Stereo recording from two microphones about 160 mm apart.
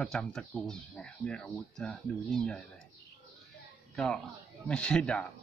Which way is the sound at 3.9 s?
5° left (ahead or behind).